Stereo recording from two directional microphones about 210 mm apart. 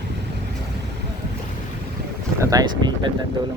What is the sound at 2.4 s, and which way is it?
Speech, 15° right (ahead or behind).